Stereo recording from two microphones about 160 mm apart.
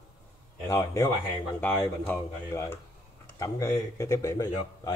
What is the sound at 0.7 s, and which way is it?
Speech, 15° left (ahead or behind).